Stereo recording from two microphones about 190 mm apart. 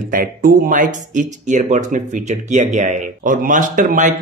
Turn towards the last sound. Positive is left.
turn(degrees=-40)  # may be behind; listen again after turning